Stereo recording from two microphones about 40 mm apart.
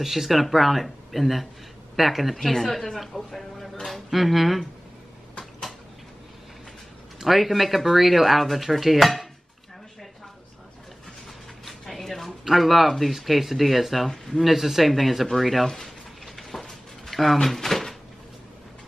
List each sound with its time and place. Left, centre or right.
0.0 s speech: centre
5.4 s a sound: centre
7.2 s speech: centre
11.6 s a sound: centre
12.3 s speech: centre
14.4 s speech: centre
15.6 s speech: centre
16.3 s a sound: centre
17.4 s drawer open or close: centre